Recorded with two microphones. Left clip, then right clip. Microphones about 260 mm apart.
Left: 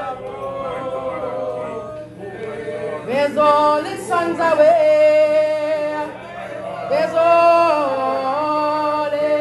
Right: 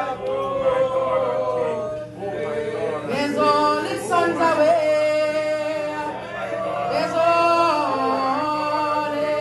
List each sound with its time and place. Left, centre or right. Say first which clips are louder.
3.1 s singing: left 6 dB; left
6.9 s music: left 5 dB; left